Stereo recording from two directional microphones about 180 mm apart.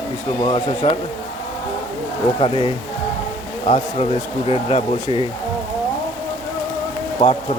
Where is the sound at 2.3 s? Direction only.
30° left (ahead or behind).